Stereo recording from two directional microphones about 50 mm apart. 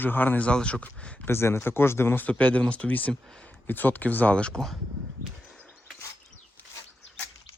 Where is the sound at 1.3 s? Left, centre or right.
Left.